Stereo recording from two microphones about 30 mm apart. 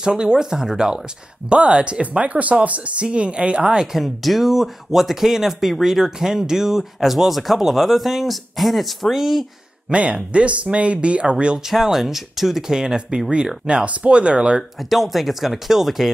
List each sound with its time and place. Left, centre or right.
0.0 s speech: right
1.8 s speech: right
3.1 s speech: right
3.6 s speech: right
3.9 s speech: centre
9.8 s speech: right
11.7 s speech: centre
12.7 s speech: right
13.8 s speech: right
14.9 s speech: centre